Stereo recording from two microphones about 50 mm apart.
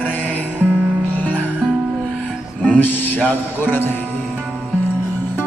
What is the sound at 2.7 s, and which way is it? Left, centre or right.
Speech, left.